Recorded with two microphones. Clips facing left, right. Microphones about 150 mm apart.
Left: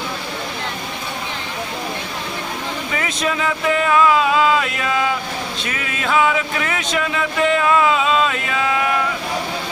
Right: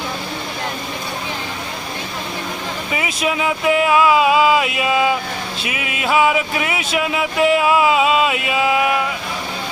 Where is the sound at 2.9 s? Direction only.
10° right (ahead or behind).